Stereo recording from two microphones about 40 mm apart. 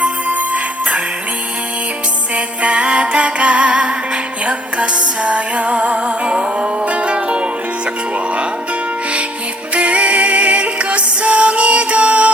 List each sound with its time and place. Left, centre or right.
0.0 s music: right
2.3 s music: right
9.7 s music: right